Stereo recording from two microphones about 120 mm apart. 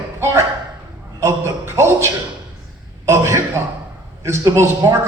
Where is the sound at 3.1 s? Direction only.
20° right (ahead or behind).